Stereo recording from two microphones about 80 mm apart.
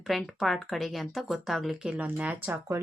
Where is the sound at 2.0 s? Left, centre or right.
Right.